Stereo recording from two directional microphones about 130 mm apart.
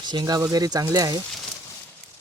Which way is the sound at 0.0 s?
35° right (ahead or behind).